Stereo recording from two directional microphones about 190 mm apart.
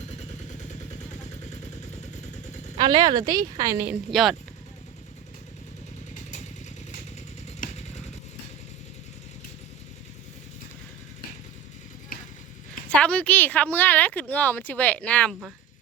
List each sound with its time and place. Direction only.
0.1 s vehicle: 35° left (ahead or behind)
2.7 s a woman's voice: 25° right (ahead or behind)
3.8 s a woman's voice: centre (ahead or behind)
7.6 s vehicle: 35° left (ahead or behind)
12.9 s speech: 5° left (ahead or behind)